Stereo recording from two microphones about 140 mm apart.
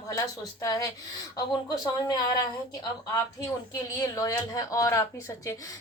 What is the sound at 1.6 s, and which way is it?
Speech, 25° left (ahead or behind).